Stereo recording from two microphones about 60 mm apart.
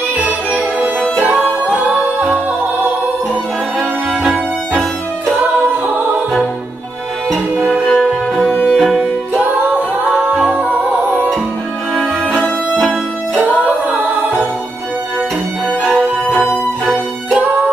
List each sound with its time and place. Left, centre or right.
0.2 s music: right
7.6 s music: centre
7.9 s music: centre
9.3 s music: right
12.7 s music: centre
13.8 s music: right
15.8 s music: centre
16.8 s music: right